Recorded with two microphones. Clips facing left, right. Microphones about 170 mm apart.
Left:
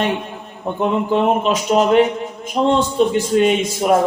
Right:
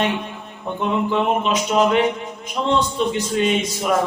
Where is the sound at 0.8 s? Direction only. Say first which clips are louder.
Left 3 dB; 45° left (ahead or behind).